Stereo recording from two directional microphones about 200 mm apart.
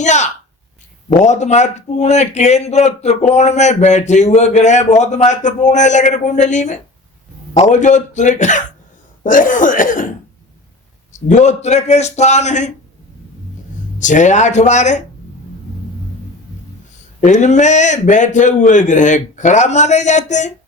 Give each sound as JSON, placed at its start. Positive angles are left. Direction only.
{"t": 0.0, "sound": "a sound", "side_deg": 35}
{"t": 1.2, "sound": "a man's voice", "side_deg": 35}
{"t": 11.1, "sound": "a man's voice", "side_deg": 35}
{"t": 14.0, "sound": "a man's voice", "side_deg": 40}
{"t": 17.2, "sound": "a man's voice", "side_deg": 40}